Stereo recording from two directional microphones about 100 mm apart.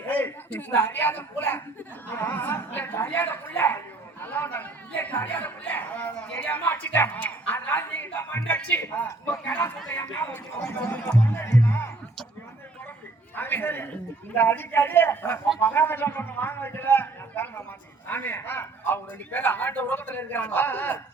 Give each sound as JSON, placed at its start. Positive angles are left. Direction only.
{"t": 0.1, "sound": "a man's voice", "side_deg": 15}
{"t": 10.9, "sound": "music", "side_deg": 20}
{"t": 13.3, "sound": "a sound", "side_deg": 20}
{"t": 14.3, "sound": "a man's voice", "side_deg": 20}